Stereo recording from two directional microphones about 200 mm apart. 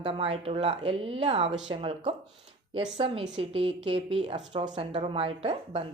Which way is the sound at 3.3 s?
30° right (ahead or behind).